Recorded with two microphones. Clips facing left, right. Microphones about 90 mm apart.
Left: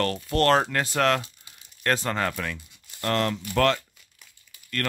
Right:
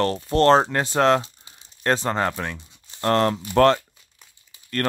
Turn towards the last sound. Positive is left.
turn(degrees=-30)  # may be behind; listen again after turning